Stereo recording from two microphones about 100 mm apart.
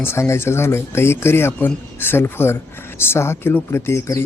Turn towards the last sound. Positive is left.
turn(degrees=25)  # may be behind; listen again after turning